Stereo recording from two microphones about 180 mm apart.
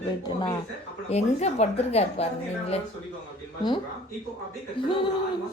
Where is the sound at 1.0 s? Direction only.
35° left (ahead or behind).